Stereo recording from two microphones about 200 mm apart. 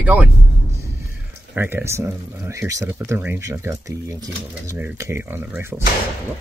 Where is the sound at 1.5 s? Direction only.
10° right (ahead or behind).